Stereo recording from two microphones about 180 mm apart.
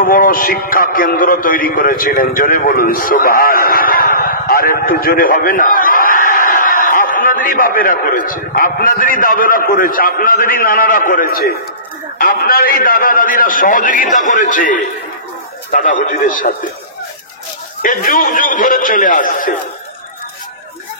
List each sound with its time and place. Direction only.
0.0 s a man's voice: 50° left (ahead or behind)
17.8 s a man's voice: 50° left (ahead or behind)